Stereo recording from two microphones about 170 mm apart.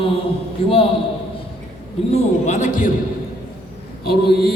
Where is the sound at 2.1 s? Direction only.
45° left (ahead or behind).